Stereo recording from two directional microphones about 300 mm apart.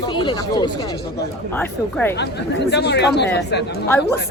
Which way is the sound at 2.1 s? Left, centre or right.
Left.